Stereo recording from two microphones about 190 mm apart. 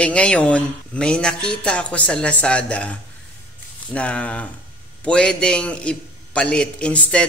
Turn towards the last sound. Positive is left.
turn(degrees=5)  # may be behind; listen again after turning